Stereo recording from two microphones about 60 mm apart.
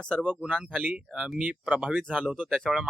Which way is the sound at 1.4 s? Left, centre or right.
Right.